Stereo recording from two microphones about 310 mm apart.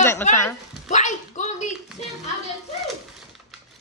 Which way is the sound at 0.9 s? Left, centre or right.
Left.